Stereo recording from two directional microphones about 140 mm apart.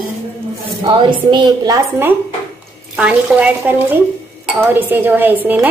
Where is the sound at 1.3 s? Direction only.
35° right (ahead or behind).